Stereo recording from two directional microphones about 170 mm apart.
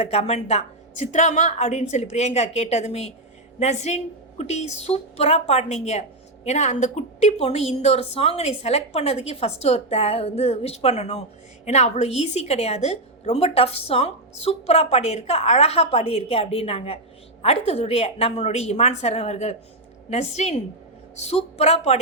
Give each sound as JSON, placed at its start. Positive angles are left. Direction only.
{"t": 0.0, "sound": "a woman's voice", "side_deg": 35}